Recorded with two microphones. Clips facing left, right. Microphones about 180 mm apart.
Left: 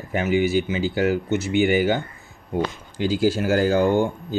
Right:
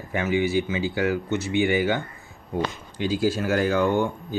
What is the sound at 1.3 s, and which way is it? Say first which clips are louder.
Speech: left 3 dB; 90° left.